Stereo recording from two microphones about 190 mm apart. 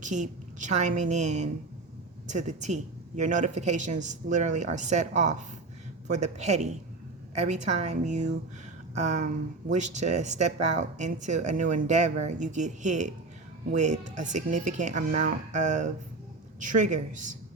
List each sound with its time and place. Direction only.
0.0 s speech: 40° right (ahead or behind)